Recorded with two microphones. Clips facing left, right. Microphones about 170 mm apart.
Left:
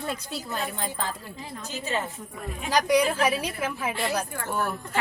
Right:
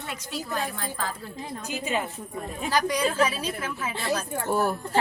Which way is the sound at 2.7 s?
15° left (ahead or behind).